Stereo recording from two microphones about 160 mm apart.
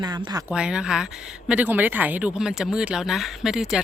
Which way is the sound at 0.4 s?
5° right (ahead or behind).